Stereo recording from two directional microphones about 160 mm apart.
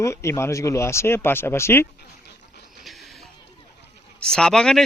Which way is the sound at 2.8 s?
Centre (ahead or behind).